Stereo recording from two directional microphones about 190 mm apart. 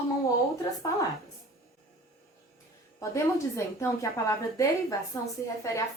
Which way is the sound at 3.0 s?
15° left (ahead or behind).